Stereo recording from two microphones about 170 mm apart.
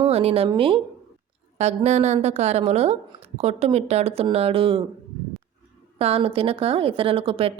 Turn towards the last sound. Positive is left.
turn(degrees=-35)  # may be behind; listen again after turning